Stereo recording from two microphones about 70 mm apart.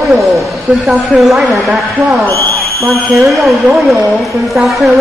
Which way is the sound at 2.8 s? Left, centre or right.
Centre.